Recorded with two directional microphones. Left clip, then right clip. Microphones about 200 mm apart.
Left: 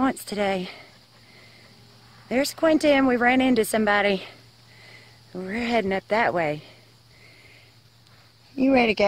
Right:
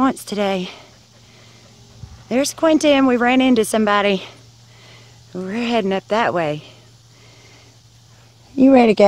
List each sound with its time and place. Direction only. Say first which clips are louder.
0.0 s speech: right 5 dB; centre (ahead or behind)
2.2 s speech: right 5 dB; centre (ahead or behind)
8.5 s speech: right 8 dB; 20° right (ahead or behind)